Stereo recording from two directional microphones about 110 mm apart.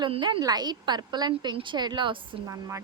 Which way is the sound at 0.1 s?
45° right (ahead or behind).